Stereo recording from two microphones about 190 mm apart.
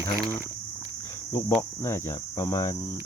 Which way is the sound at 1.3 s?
15° left (ahead or behind).